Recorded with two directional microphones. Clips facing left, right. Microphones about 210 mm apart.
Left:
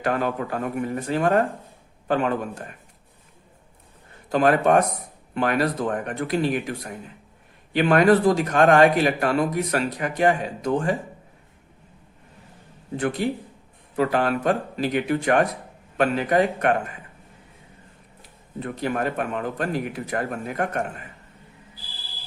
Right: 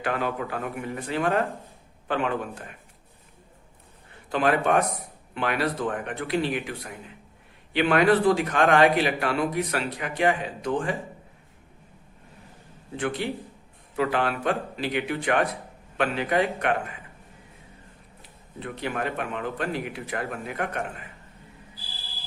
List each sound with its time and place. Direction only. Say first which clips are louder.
0.0 s a man's voice: left 4 dB; 40° left (ahead or behind)
4.3 s a man's voice: left 4 dB; 45° left (ahead or behind)
13.0 s a man's voice: left 4 dB; 40° left (ahead or behind)
18.6 s a man's voice: left 4 dB; 45° left (ahead or behind)